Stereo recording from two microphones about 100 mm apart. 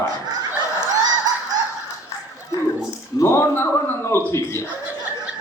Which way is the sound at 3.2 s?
30° left (ahead or behind).